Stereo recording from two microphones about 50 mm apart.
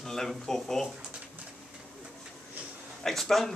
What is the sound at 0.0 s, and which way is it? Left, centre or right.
Speech, centre.